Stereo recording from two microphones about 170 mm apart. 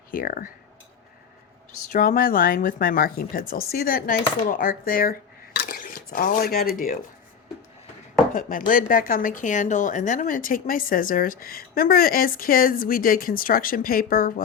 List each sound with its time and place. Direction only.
0.1 s speech: 55° left (ahead or behind)
1.9 s speech: 50° left (ahead or behind)
8.3 s speech: 55° left (ahead or behind)